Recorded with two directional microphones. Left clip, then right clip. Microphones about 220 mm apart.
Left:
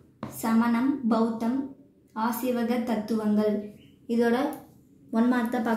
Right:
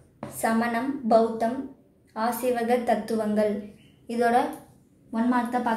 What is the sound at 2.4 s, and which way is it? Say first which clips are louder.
A woman's voice: right 4 dB; 40° right (ahead or behind).